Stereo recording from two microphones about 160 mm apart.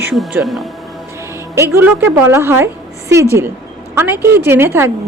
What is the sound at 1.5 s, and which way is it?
A woman's voice, 15° right (ahead or behind).